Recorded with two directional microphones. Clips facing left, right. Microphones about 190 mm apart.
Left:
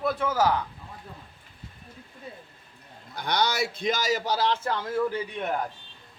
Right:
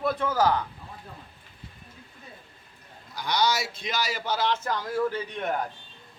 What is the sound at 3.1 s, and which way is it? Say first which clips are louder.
A man's voice: right 1 dB; 55° left (ahead or behind).